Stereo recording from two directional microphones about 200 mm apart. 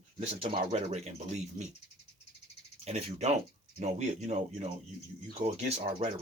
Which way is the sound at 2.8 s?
30° right (ahead or behind).